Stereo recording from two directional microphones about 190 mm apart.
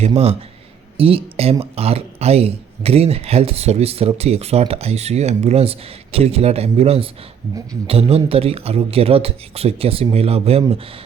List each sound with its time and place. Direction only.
0.0 s speech: 35° right (ahead or behind)